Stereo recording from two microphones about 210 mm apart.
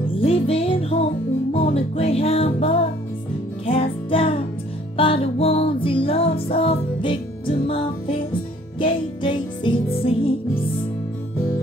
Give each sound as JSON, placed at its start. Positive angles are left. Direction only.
{"t": 0.2, "sound": "music", "side_deg": 25}